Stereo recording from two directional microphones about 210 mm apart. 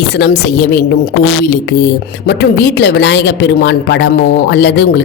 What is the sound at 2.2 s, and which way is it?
Speech, 55° left (ahead or behind).